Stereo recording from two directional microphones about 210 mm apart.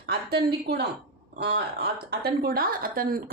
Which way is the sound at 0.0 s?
50° right (ahead or behind).